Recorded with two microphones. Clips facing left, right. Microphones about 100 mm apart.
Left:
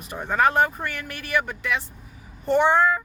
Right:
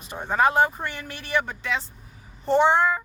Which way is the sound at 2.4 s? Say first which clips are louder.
Even; 20° right (ahead or behind).